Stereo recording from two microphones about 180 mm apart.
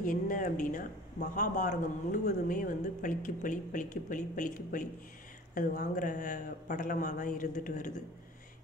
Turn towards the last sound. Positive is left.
turn(degrees=45)  # may be behind; listen again after turning